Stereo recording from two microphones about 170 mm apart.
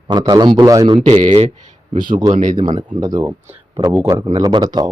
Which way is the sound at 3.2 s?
10° right (ahead or behind).